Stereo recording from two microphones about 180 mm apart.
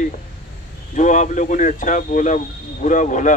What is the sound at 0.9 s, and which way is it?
Speech, 40° left (ahead or behind).